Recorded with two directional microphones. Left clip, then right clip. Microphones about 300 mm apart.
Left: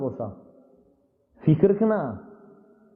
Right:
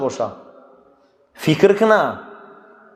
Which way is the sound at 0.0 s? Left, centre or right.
Centre.